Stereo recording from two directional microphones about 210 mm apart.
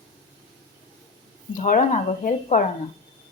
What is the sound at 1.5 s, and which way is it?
Speech, 40° left (ahead or behind).